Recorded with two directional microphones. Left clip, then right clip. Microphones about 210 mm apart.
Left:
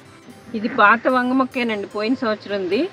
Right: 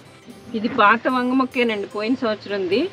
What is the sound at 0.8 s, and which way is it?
Speech, 25° left (ahead or behind).